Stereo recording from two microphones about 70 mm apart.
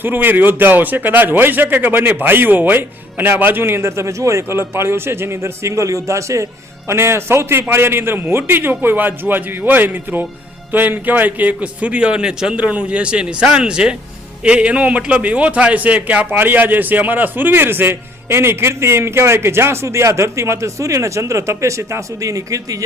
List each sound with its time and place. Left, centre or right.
0.0 s a man's voice: right